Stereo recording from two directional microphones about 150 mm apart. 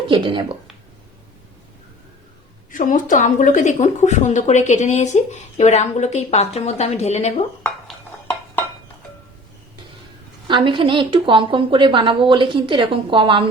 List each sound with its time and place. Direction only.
0.1 s a woman's voice: 35° right (ahead or behind)
2.7 s a woman's voice: 60° left (ahead or behind)
10.5 s a woman's voice: 35° right (ahead or behind)